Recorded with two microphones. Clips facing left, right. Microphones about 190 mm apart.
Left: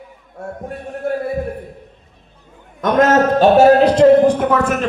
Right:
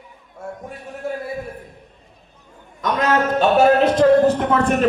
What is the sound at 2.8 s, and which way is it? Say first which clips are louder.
A man's voice: left 6 dB; 50° left (ahead or behind).